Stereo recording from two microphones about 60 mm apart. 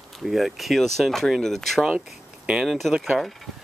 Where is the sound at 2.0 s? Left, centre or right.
Centre.